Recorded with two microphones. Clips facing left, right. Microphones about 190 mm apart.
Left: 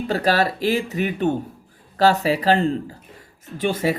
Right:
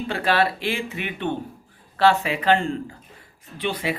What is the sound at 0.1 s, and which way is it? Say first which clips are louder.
Speech: left 2 dB; 40° left (ahead or behind).